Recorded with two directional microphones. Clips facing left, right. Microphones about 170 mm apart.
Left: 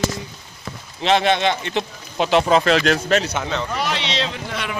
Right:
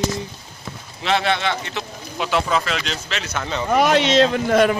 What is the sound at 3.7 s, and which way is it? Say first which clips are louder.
A man's voice: right 9 dB; 50° right (ahead or behind).